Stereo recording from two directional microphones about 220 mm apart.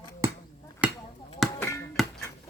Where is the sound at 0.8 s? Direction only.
5° right (ahead or behind).